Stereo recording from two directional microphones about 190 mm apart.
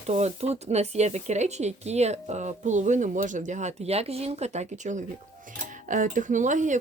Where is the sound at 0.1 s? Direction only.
35° right (ahead or behind).